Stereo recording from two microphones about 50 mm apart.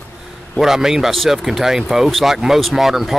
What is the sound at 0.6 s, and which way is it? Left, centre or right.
Speech, centre.